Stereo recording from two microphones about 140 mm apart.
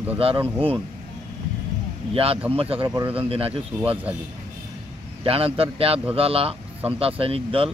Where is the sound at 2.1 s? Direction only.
45° right (ahead or behind).